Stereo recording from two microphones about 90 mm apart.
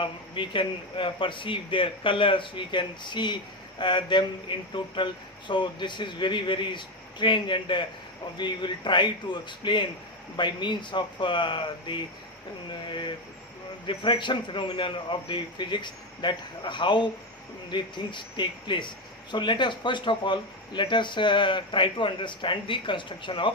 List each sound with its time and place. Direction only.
0.0 s speech: 65° left (ahead or behind)